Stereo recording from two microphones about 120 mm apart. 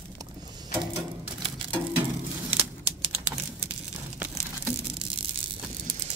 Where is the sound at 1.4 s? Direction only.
50° right (ahead or behind).